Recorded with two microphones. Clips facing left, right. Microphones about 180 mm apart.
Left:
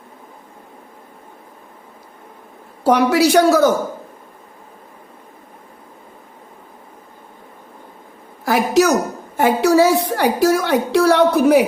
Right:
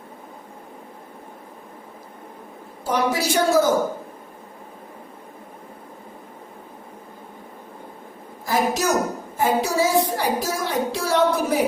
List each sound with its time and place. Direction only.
2.8 s a woman's voice: 70° left (ahead or behind)
8.4 s a woman's voice: 70° left (ahead or behind)